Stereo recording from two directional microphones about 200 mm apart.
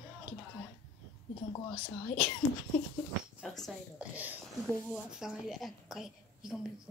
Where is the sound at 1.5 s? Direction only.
25° left (ahead or behind).